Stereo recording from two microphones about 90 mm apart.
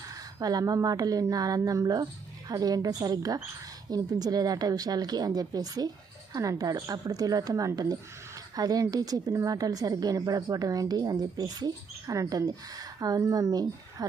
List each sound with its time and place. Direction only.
0.1 s a woman's voice: 45° right (ahead or behind)